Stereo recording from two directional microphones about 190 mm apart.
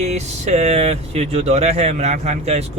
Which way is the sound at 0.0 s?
35° right (ahead or behind).